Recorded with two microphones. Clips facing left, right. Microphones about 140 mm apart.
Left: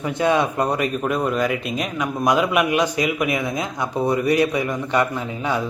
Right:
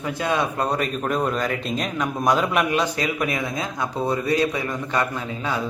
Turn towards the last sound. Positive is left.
turn(degrees=15)  # may be behind; listen again after turning